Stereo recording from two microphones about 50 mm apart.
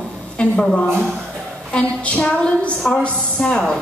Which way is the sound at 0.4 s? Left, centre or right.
Left.